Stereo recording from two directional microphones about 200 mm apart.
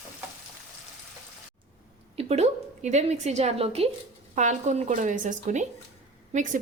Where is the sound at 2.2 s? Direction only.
30° right (ahead or behind).